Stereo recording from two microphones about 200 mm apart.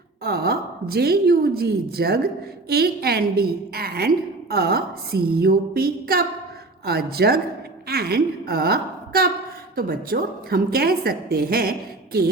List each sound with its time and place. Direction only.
0.3 s a woman's voice: 50° right (ahead or behind)